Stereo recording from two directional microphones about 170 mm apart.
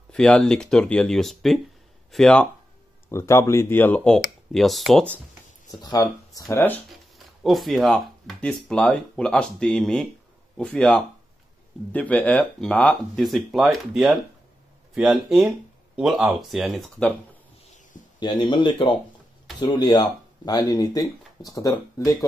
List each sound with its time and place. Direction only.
0.1 s speech: 5° left (ahead or behind)
3.1 s speech: 15° left (ahead or behind)
5.7 s speech: 20° left (ahead or behind)
6.5 s speech: 10° left (ahead or behind)
7.4 s speech: centre (ahead or behind)
18.2 s speech: 25° left (ahead or behind)